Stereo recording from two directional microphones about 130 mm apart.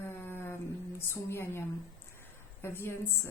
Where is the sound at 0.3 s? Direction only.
15° left (ahead or behind).